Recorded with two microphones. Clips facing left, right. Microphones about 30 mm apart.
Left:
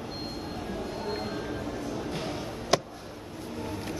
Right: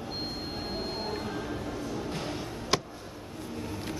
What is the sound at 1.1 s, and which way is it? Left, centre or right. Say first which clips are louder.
Music: left 1 dB; centre.